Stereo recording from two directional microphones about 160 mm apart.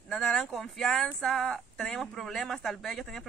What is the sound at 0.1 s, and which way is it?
Speech, 5° left (ahead or behind).